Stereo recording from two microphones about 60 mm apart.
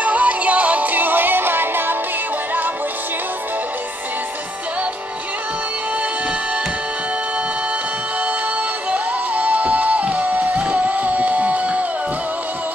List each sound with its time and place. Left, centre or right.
0.0 s music: right
8.9 s music: right